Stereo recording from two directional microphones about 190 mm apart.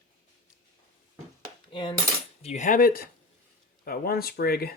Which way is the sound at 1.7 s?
25° left (ahead or behind).